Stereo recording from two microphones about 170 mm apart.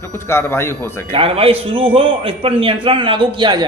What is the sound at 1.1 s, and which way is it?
A man's voice, 30° right (ahead or behind).